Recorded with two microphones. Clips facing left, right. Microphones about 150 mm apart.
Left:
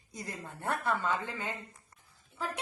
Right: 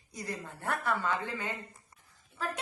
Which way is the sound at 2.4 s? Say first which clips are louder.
Right 1 dB; 10° left (ahead or behind).